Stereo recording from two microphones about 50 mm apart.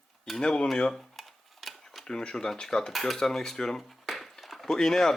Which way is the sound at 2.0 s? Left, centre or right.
Centre.